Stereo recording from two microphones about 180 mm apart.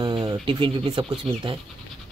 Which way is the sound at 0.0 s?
25° right (ahead or behind).